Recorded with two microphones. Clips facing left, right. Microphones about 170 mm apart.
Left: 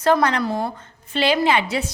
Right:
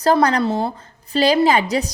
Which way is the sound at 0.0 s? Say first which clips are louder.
Right 2 dB; 35° right (ahead or behind).